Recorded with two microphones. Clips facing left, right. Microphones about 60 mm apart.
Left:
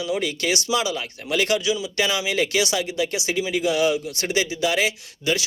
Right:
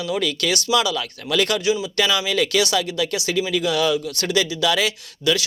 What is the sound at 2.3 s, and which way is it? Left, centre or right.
Speech, right.